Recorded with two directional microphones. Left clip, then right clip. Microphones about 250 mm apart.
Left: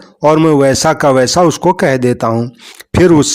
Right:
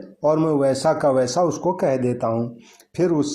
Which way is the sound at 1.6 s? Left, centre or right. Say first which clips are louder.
Left 9 dB; left.